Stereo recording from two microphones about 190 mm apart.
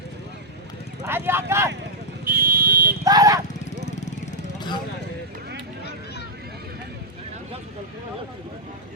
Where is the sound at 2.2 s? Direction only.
50° right (ahead or behind).